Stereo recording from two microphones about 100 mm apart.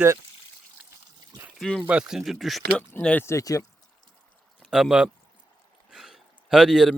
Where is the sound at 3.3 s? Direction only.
30° left (ahead or behind).